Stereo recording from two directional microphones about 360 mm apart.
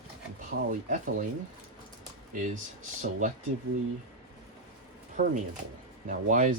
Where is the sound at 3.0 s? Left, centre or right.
Right.